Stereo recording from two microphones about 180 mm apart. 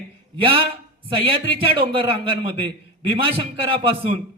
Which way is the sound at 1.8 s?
30° right (ahead or behind).